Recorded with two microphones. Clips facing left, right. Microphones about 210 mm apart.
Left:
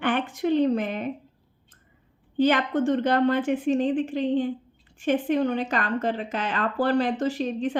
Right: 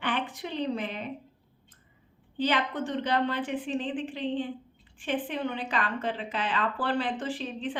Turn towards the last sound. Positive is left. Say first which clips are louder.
# left 7 dB
turn(degrees=45)  # may be behind; listen again after turning